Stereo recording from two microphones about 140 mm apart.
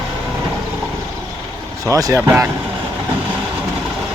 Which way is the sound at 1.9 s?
20° right (ahead or behind).